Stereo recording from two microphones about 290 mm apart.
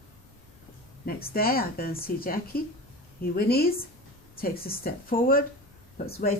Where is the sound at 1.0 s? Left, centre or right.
Left.